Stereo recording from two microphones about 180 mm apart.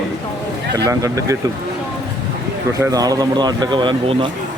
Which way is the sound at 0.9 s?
15° right (ahead or behind).